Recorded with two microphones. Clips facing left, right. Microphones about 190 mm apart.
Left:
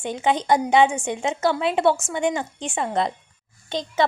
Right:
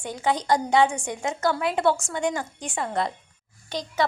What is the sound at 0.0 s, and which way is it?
A woman's voice, 25° left (ahead or behind).